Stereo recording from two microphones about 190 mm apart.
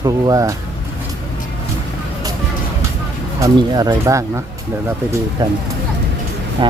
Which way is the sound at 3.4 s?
20° right (ahead or behind).